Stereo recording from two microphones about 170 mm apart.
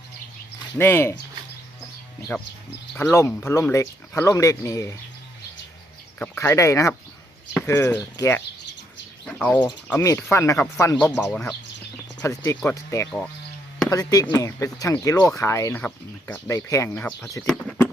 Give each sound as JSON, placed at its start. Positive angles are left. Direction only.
{"t": 0.8, "sound": "speech", "side_deg": 15}
{"t": 2.9, "sound": "speech", "side_deg": 15}
{"t": 6.1, "sound": "speech", "side_deg": 10}
{"t": 9.2, "sound": "bird", "side_deg": 10}
{"t": 9.9, "sound": "speech", "side_deg": 15}
{"t": 11.1, "sound": "speech", "side_deg": 0}
{"t": 12.2, "sound": "speech", "side_deg": 20}
{"t": 17.4, "sound": "speech", "side_deg": 5}